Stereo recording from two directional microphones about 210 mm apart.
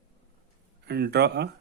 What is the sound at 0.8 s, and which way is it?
Speech, 50° right (ahead or behind).